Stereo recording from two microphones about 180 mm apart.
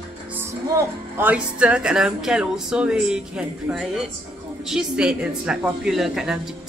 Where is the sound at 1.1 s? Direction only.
10° right (ahead or behind).